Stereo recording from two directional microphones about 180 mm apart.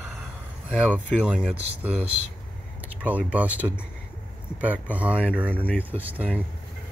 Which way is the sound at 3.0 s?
10° right (ahead or behind).